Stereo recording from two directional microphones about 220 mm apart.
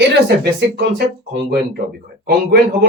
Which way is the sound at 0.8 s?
50° right (ahead or behind).